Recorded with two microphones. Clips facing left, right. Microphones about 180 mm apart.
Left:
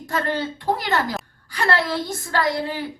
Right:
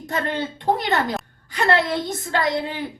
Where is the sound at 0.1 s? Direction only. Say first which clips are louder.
Left 1 dB; 20° right (ahead or behind).